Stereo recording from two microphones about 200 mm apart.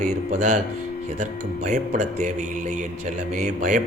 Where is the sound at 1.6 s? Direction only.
35° right (ahead or behind).